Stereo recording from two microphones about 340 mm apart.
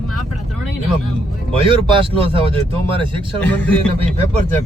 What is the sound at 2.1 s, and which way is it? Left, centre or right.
Speech, centre.